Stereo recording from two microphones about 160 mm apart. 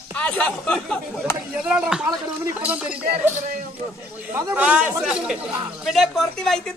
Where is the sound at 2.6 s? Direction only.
5° right (ahead or behind).